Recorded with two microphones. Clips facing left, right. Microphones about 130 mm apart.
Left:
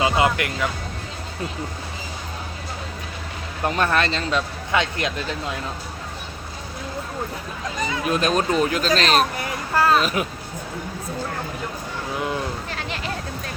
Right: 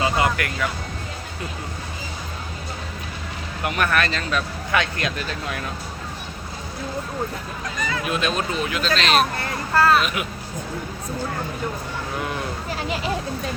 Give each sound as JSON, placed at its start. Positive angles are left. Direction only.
{"t": 0.0, "sound": "speech", "side_deg": 20}
{"t": 3.6, "sound": "speech", "side_deg": 30}
{"t": 8.1, "sound": "speech", "side_deg": 40}
{"t": 9.4, "sound": "speech", "side_deg": 15}
{"t": 10.0, "sound": "speech", "side_deg": 35}